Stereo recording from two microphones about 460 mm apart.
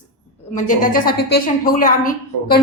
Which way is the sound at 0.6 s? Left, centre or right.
Centre.